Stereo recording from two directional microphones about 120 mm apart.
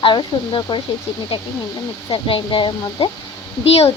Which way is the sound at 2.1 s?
45° left (ahead or behind).